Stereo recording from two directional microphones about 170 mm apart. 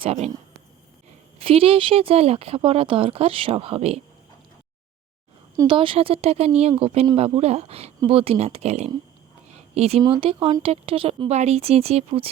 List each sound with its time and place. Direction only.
0.0 s speech: 35° right (ahead or behind)
1.4 s speech: 35° right (ahead or behind)
5.5 s speech: 30° right (ahead or behind)
9.5 s a sound: 40° right (ahead or behind)
10.0 s speech: 30° right (ahead or behind)